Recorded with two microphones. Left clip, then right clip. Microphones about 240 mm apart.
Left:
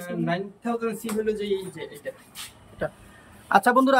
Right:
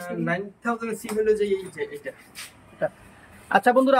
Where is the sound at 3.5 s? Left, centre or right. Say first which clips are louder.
Even; centre.